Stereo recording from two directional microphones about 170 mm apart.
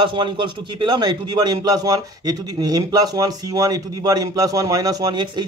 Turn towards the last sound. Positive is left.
turn(degrees=-25)  # may be behind; listen again after turning